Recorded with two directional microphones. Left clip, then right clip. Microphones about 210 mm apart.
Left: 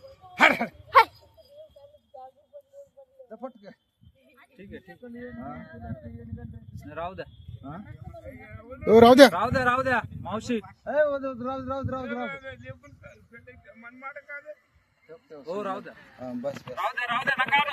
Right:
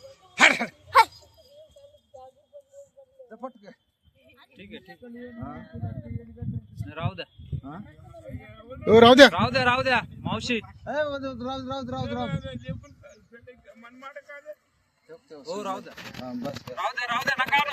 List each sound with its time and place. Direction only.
0.3 s a sound: 50° left (ahead or behind)
3.2 s bird: 50° left (ahead or behind)
4.4 s a sound: 30° left (ahead or behind)
4.9 s speech: 20° right (ahead or behind)
5.4 s speech: 45° left (ahead or behind)
6.8 s speech: 35° left (ahead or behind)
8.2 s a sound: centre (ahead or behind)
9.3 s speech: 45° left (ahead or behind)
10.8 s a man's voice: 35° left (ahead or behind)
13.8 s a sound: 10° right (ahead or behind)
15.0 s speech: 35° left (ahead or behind)
16.6 s speech: centre (ahead or behind)